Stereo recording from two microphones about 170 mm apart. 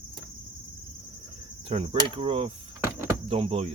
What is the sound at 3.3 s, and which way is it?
Speech, 35° right (ahead or behind).